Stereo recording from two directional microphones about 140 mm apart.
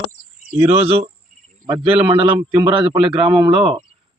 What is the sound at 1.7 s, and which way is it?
Speech, 40° right (ahead or behind).